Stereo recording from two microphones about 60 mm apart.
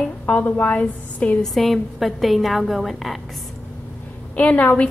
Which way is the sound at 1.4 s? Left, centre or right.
Centre.